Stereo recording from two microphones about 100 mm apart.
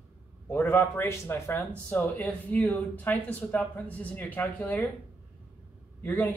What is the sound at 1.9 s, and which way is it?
Speech, 15° left (ahead or behind).